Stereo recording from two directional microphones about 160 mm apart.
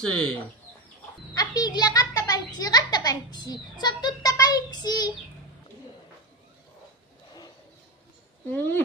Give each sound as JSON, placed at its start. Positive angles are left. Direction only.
{"t": 0.0, "sound": "speech", "side_deg": 5}
{"t": 1.3, "sound": "a sound", "side_deg": 25}
{"t": 8.5, "sound": "speech", "side_deg": 10}